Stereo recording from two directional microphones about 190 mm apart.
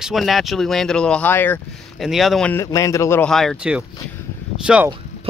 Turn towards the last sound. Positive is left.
turn(degrees=-5)  # may be behind; listen again after turning